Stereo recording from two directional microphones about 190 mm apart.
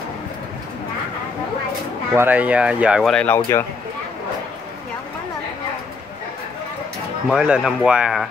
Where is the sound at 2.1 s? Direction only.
10° right (ahead or behind).